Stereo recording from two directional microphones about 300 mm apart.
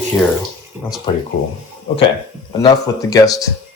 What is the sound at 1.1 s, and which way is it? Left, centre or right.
Speech, centre.